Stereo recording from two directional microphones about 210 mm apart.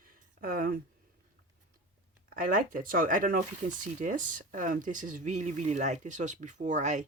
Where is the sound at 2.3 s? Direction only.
40° right (ahead or behind).